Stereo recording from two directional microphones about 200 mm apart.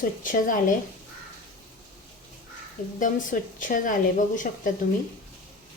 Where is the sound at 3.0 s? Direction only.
40° left (ahead or behind).